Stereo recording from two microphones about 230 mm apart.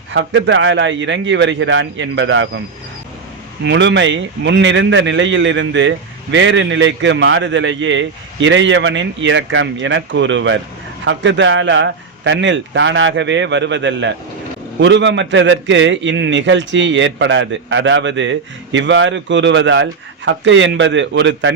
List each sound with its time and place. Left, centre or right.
0.1 s a man's voice: right
3.6 s a man's voice: right